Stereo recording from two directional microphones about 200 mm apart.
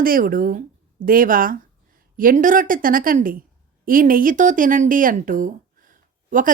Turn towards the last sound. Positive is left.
turn(degrees=-40)  # may be behind; listen again after turning